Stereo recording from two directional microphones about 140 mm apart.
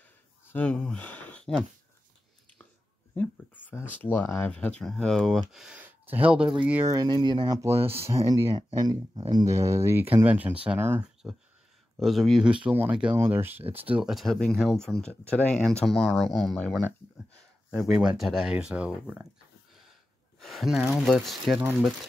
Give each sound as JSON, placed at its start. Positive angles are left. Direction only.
{"t": 0.5, "sound": "speech", "side_deg": 10}
{"t": 3.2, "sound": "speech", "side_deg": 10}
{"t": 6.9, "sound": "speech", "side_deg": -30}
{"t": 12.0, "sound": "speech", "side_deg": 0}
{"t": 12.6, "sound": "speech", "side_deg": -10}
{"t": 18.1, "sound": "speech", "side_deg": 0}
{"t": 20.3, "sound": "speech", "side_deg": 0}